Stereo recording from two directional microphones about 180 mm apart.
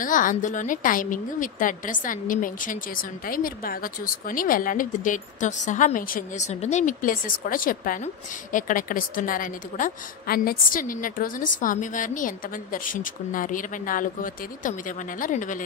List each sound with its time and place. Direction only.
0.0 s a woman's voice: 45° left (ahead or behind)